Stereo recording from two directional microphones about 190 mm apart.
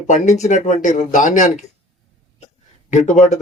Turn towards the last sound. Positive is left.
turn(degrees=35)  # may be behind; listen again after turning